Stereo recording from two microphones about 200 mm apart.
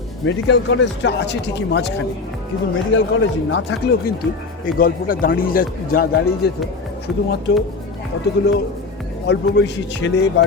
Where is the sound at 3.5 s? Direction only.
50° left (ahead or behind).